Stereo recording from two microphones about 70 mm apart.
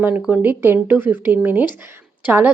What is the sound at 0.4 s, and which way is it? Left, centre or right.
Speech, right.